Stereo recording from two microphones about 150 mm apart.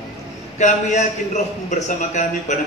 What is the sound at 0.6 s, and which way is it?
Speech, 55° left (ahead or behind).